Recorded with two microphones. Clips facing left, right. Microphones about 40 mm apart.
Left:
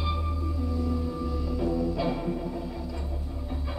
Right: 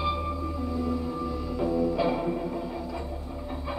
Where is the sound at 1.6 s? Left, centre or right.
Centre.